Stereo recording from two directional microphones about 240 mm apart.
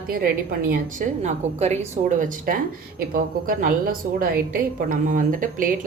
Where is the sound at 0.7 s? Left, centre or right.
Right.